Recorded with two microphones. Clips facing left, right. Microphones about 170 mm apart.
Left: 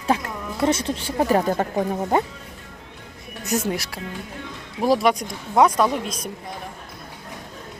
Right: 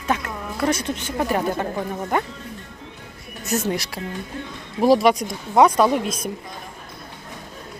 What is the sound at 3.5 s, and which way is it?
Speech, 5° left (ahead or behind).